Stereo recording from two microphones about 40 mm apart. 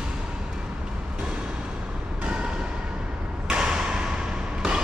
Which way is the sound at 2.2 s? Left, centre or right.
Right.